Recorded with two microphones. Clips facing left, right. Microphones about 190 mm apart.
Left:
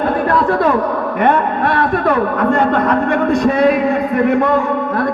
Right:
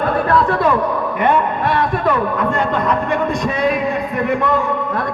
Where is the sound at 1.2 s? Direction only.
55° left (ahead or behind).